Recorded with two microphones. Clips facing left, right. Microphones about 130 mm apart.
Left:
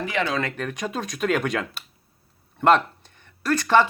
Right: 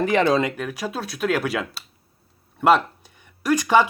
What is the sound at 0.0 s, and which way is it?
Speech, 40° right (ahead or behind).